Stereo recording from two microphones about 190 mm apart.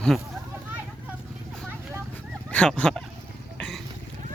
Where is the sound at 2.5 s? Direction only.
5° left (ahead or behind).